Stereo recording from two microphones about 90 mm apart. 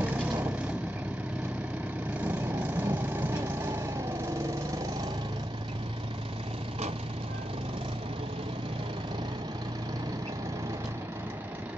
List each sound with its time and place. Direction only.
0.0 s vehicle: 15° right (ahead or behind)
2.2 s vehicle: 20° right (ahead or behind)